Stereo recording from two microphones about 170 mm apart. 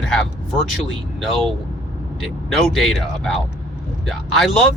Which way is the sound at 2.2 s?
Centre (ahead or behind).